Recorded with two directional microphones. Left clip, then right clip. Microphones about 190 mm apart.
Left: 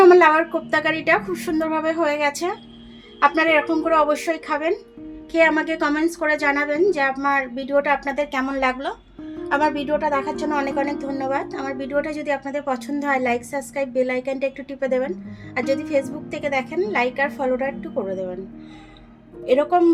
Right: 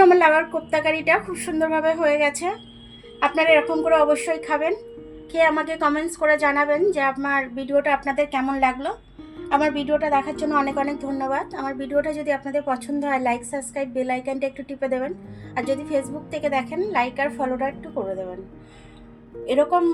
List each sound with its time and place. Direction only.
0.0 s a woman's voice: 55° left (ahead or behind)
19.5 s a woman's voice: 50° left (ahead or behind)